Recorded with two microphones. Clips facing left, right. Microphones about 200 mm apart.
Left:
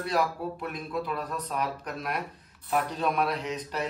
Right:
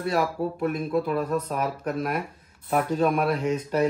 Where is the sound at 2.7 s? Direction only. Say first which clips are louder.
Right 5 dB; 50° right (ahead or behind).